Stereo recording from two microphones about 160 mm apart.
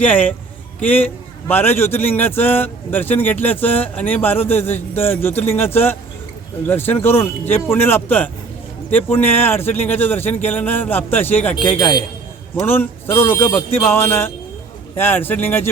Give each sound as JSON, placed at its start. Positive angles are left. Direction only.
{"t": 0.0, "sound": "a man's voice", "side_deg": 10}
{"t": 11.7, "sound": "a man's voice", "side_deg": 30}
{"t": 12.5, "sound": "a man's voice", "side_deg": 15}